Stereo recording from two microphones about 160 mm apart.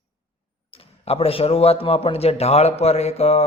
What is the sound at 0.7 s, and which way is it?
A man's voice, 35° left (ahead or behind).